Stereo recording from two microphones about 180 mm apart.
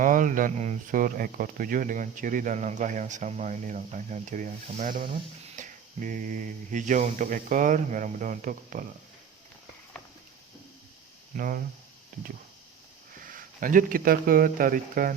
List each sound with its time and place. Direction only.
0.0 s speech: 45° right (ahead or behind)
11.3 s speech: 50° right (ahead or behind)
13.1 s speech: 50° right (ahead or behind)